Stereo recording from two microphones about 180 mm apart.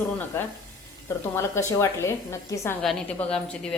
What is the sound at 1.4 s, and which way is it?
A woman's voice, 15° left (ahead or behind).